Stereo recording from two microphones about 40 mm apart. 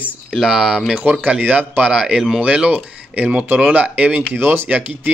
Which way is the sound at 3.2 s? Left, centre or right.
Right.